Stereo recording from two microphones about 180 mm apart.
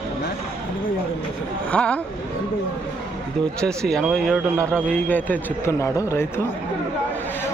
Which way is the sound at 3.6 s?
5° left (ahead or behind).